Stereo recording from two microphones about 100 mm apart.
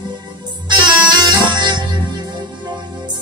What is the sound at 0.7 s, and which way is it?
Music, 50° right (ahead or behind).